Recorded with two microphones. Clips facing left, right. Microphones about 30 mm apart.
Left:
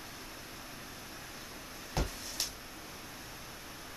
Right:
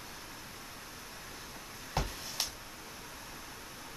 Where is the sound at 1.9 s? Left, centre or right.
Centre.